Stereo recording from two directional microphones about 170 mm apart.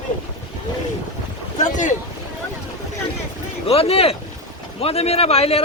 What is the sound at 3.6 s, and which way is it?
A man's voice, 35° left (ahead or behind).